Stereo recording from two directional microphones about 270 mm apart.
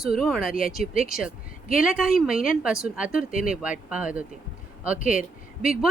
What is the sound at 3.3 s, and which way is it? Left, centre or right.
Speech, left.